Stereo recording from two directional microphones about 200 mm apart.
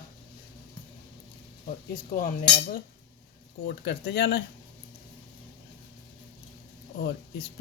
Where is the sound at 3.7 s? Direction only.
55° left (ahead or behind).